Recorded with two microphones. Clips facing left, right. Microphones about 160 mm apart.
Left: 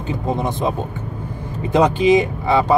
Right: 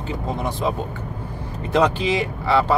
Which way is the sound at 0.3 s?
20° left (ahead or behind).